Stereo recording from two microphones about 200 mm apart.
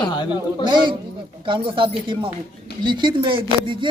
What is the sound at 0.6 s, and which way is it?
Speech, 20° right (ahead or behind).